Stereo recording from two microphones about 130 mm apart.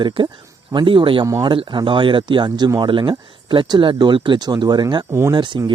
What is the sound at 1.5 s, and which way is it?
Speech, 35° right (ahead or behind).